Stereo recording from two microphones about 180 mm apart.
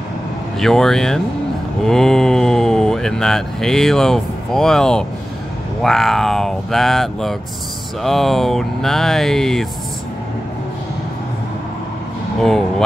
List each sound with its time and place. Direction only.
0.6 s speech: centre (ahead or behind)
12.4 s speech: centre (ahead or behind)